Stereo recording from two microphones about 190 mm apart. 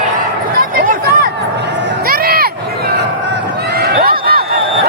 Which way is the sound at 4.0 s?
50° right (ahead or behind).